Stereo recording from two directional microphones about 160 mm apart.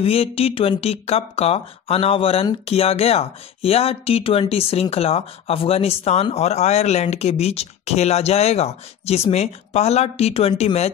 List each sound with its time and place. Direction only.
0.0 s speech: 35° left (ahead or behind)